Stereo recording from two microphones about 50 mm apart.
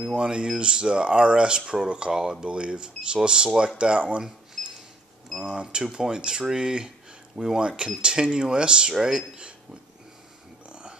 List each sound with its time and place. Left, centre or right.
0.0 s speech: centre
4.6 s a sound: centre
5.4 s speech: centre
10.7 s dog: centre